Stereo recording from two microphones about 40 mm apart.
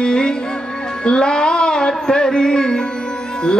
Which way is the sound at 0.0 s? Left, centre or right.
Centre.